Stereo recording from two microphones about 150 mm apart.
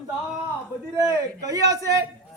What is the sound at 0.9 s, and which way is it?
Speech, 20° right (ahead or behind).